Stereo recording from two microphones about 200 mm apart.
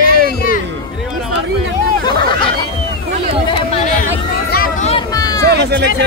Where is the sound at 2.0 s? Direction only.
20° left (ahead or behind).